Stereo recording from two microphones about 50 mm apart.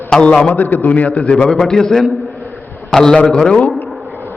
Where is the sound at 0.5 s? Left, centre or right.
Left.